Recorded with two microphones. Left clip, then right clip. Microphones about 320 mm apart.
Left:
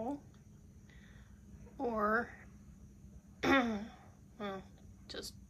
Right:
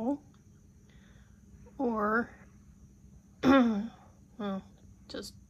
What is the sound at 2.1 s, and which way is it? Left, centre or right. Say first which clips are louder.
Speech: right 4 dB; centre.